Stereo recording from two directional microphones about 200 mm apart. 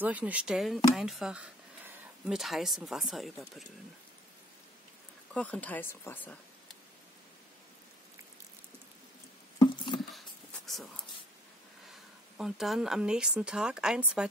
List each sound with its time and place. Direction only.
0.0 s speech: 5° right (ahead or behind)
5.3 s speech: 5° left (ahead or behind)
9.6 s patter: 25° left (ahead or behind)
10.7 s a sound: centre (ahead or behind)
11.9 s speech: centre (ahead or behind)